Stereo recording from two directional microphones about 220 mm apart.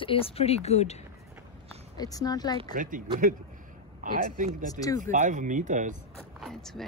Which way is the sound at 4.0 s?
40° right (ahead or behind).